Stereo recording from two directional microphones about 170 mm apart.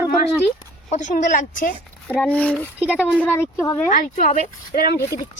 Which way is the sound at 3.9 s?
50° left (ahead or behind).